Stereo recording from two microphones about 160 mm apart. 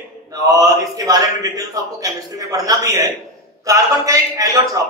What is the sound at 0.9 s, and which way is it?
A man's voice, 20° right (ahead or behind).